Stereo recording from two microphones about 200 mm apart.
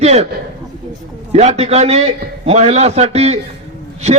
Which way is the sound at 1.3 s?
30° right (ahead or behind).